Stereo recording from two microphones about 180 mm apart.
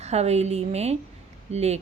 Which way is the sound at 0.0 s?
35° right (ahead or behind).